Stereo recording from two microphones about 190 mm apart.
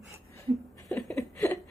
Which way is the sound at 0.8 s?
15° left (ahead or behind).